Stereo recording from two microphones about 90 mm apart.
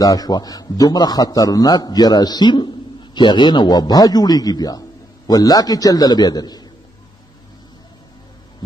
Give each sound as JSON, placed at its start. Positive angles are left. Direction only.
{"t": 0.0, "sound": "a man's voice", "side_deg": 45}